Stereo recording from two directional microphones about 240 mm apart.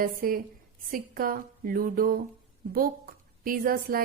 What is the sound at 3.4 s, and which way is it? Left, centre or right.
Speech, right.